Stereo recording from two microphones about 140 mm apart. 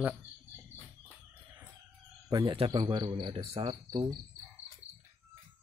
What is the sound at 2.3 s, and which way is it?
Speech, 30° right (ahead or behind).